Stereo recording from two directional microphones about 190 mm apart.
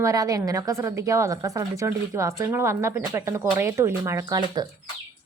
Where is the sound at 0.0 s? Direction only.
20° right (ahead or behind).